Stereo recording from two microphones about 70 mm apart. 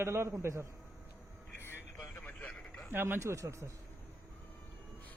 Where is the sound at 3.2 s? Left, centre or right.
Right.